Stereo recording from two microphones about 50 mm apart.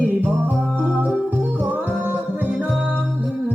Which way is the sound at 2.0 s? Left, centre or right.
Right.